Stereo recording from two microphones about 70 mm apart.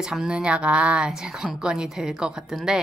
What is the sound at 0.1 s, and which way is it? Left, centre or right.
Speech, centre.